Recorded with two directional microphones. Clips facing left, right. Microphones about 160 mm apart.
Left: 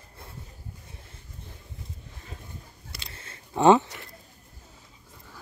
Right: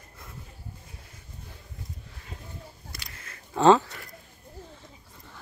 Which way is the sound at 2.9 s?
30° left (ahead or behind).